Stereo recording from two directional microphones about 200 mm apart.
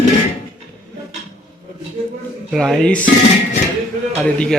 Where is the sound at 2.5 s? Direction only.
Centre (ahead or behind).